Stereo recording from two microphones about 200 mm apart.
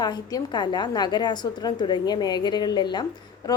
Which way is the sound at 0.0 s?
20° left (ahead or behind).